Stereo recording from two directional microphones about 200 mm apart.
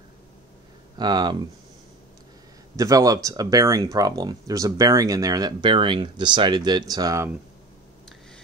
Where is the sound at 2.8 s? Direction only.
15° right (ahead or behind).